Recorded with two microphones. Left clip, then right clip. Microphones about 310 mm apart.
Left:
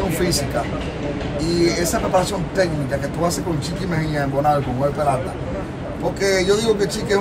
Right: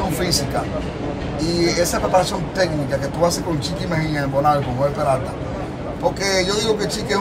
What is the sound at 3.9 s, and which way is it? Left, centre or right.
Speech, centre.